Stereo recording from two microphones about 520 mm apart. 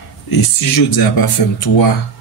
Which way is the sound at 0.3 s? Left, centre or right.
Left.